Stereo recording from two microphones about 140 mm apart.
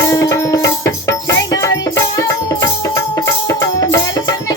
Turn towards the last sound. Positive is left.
turn(degrees=25)  # may be behind; listen again after turning